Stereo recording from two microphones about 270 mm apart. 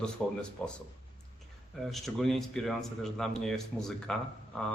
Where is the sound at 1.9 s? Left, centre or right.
Centre.